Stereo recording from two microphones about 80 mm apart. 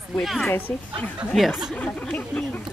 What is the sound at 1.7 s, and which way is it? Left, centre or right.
Speech, centre.